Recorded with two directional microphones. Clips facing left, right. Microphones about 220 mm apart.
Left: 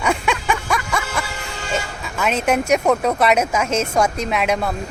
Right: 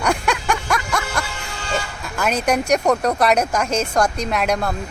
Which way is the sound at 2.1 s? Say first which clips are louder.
Left 1 dB; centre (ahead or behind).